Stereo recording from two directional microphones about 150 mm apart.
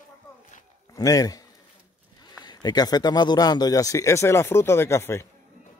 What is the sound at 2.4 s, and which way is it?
Speech, 30° left (ahead or behind).